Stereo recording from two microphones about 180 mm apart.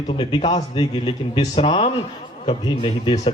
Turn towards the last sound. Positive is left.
turn(degrees=30)  # may be behind; listen again after turning